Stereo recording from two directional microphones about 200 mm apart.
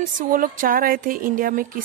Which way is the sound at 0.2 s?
45° right (ahead or behind).